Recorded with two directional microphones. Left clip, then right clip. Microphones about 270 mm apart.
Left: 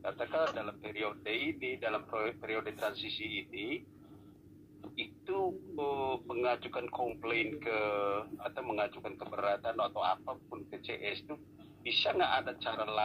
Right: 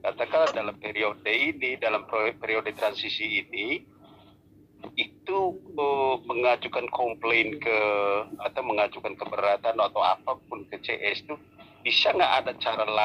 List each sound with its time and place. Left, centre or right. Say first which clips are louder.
0.0 s speech: right 10 dB; right
4.8 s speech: right 10 dB; right